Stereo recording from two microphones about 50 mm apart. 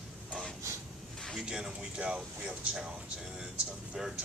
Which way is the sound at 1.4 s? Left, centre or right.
Centre.